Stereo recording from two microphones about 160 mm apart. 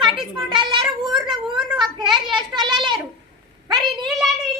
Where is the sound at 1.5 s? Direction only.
5° right (ahead or behind).